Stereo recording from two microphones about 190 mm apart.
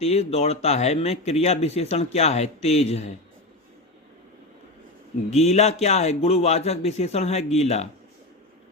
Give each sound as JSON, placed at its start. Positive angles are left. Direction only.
{"t": 0.0, "sound": "speech", "side_deg": 35}
{"t": 5.3, "sound": "speech", "side_deg": 35}